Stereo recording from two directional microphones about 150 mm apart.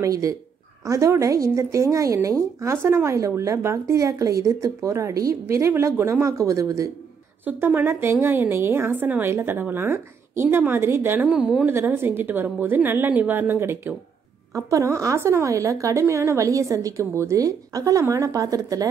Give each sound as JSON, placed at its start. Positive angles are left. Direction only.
{"t": 0.0, "sound": "a woman's voice", "side_deg": -20}